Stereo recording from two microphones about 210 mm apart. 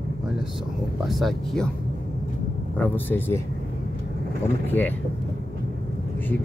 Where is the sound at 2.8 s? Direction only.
10° left (ahead or behind).